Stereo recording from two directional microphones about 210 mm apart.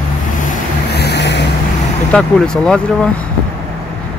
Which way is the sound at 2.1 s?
5° left (ahead or behind).